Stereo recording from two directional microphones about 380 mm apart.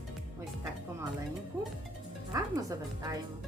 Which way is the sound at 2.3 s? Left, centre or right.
Centre.